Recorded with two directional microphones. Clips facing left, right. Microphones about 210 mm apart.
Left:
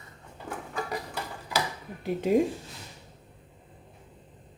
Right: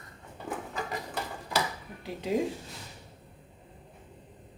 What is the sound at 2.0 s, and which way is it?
Speech, 50° left (ahead or behind).